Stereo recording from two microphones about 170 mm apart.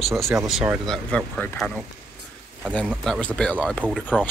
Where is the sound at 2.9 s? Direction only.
Centre (ahead or behind).